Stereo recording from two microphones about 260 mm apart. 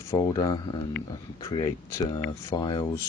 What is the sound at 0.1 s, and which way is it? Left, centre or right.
Speech, centre.